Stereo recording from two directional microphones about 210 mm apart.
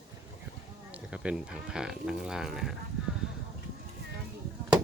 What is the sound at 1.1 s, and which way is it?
Speech, 5° right (ahead or behind).